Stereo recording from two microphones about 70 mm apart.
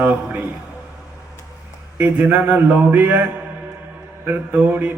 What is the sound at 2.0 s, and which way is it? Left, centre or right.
A man's voice, right.